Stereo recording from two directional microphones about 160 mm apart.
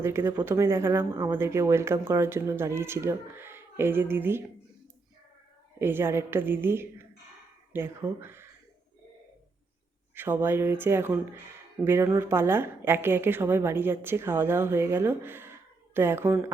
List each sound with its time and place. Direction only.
0.0 s a woman's voice: 15° right (ahead or behind)
5.8 s a woman's voice: 15° right (ahead or behind)
10.2 s a woman's voice: 15° right (ahead or behind)